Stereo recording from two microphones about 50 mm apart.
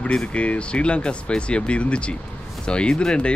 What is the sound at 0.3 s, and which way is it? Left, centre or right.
Speech, left.